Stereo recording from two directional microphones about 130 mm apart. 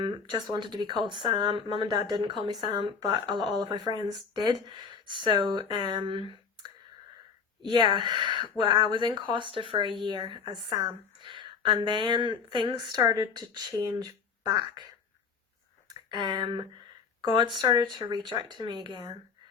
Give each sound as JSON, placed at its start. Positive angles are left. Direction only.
{"t": 0.0, "sound": "a woman's voice", "side_deg": -35}
{"t": 7.6, "sound": "a woman's voice", "side_deg": -40}
{"t": 15.9, "sound": "a sound", "side_deg": -35}
{"t": 17.2, "sound": "a woman's voice", "side_deg": -35}